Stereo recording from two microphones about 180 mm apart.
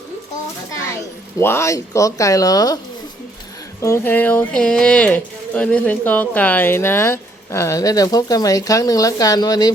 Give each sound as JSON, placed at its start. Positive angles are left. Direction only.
{"t": 0.7, "sound": "a sound", "side_deg": 20}
{"t": 1.4, "sound": "speech", "side_deg": 15}
{"t": 3.8, "sound": "speech", "side_deg": 15}